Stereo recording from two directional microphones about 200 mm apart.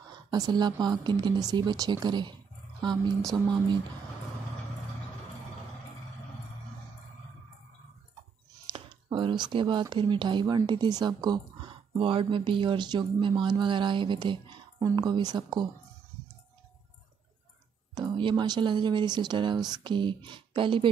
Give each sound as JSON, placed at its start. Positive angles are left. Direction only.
{"t": 0.3, "sound": "speech", "side_deg": -20}
{"t": 8.7, "sound": "speech", "side_deg": -25}
{"t": 17.9, "sound": "speech", "side_deg": -25}